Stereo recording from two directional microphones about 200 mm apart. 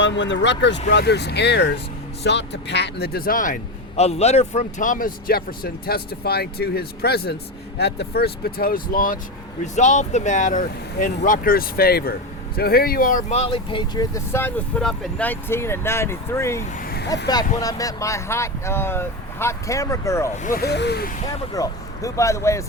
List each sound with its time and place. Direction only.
0.0 s speech: 65° left (ahead or behind); by 16.6 s 15° left (ahead or behind)
16.7 s vehicle: 50° left (ahead or behind)
17.6 s speech: 15° left (ahead or behind)
20.3 s speech: 40° left (ahead or behind)
21.5 s speech: 15° left (ahead or behind)